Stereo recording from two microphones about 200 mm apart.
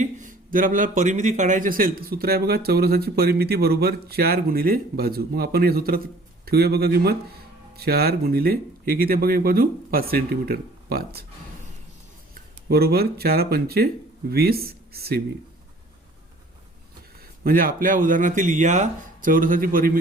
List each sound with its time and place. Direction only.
0.0 s speech: 40° right (ahead or behind)
12.3 s speech: 50° right (ahead or behind)
17.4 s speech: 45° right (ahead or behind)